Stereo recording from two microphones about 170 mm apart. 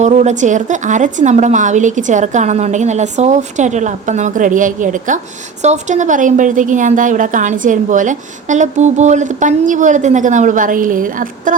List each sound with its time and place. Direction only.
0.0 s a woman's voice: 45° right (ahead or behind)